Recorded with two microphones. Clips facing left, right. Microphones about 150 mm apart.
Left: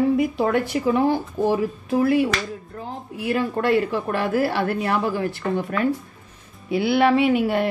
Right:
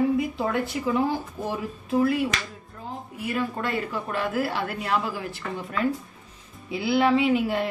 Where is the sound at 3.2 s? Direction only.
70° left (ahead or behind).